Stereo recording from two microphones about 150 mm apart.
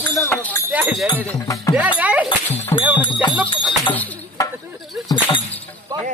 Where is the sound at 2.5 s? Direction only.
15° left (ahead or behind).